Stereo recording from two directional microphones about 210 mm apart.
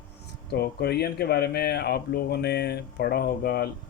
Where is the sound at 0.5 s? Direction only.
50° left (ahead or behind).